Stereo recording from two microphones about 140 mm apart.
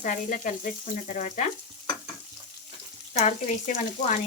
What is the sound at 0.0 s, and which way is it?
Speech, 65° left (ahead or behind).